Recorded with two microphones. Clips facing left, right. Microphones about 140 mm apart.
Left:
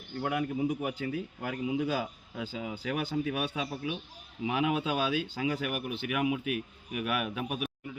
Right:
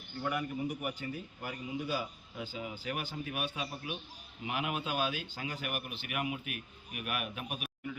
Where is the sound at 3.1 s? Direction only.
90° left.